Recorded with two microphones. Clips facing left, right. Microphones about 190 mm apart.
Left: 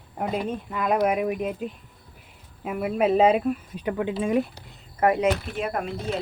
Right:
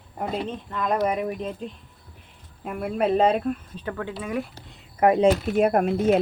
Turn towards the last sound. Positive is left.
turn(degrees=-45)  # may be behind; listen again after turning